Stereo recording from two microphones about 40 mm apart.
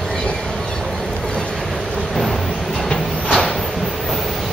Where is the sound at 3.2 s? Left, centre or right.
Centre.